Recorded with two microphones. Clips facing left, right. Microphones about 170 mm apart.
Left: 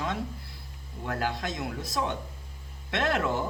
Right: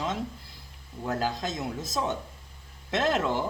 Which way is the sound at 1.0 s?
25° right (ahead or behind).